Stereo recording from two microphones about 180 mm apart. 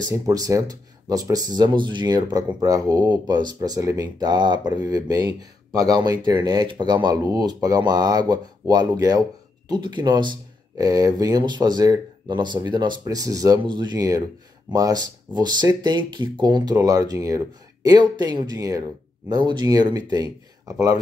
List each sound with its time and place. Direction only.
0.0 s speech: 20° right (ahead or behind)